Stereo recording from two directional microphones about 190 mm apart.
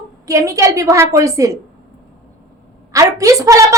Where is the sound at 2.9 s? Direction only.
15° right (ahead or behind).